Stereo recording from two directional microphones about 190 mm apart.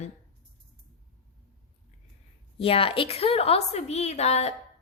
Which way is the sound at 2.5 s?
30° left (ahead or behind).